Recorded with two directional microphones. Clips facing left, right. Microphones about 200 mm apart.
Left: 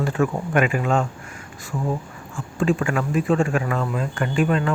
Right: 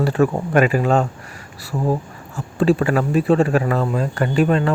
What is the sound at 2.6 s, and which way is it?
Speech, 35° right (ahead or behind).